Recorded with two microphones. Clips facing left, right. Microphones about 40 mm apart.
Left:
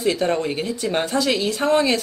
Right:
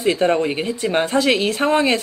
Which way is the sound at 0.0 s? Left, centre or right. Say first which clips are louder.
Right 3 dB; right.